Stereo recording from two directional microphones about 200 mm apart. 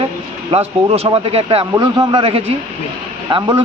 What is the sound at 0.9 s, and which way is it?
Speech, 30° right (ahead or behind).